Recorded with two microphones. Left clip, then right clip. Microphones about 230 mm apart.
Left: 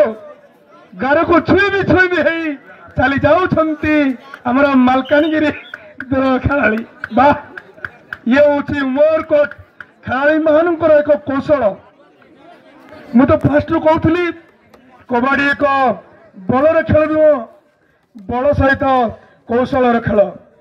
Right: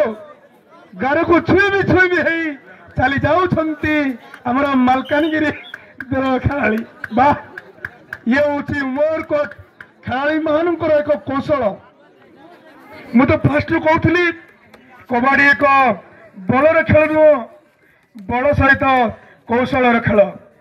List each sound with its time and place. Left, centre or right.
0.9 s a man's voice: left
13.1 s a man's voice: left